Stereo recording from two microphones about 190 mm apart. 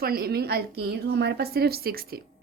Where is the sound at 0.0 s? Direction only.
55° right (ahead or behind).